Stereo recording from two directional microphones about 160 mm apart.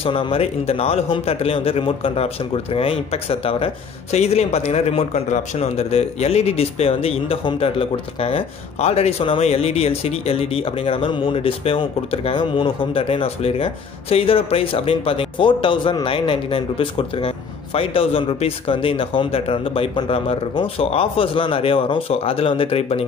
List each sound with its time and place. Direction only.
0.0 s speech: 35° left (ahead or behind)